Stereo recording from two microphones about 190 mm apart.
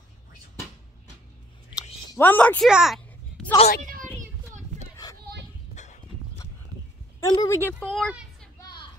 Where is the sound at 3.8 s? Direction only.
45° right (ahead or behind).